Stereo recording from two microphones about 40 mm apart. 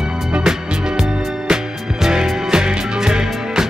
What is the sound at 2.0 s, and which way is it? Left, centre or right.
Music, centre.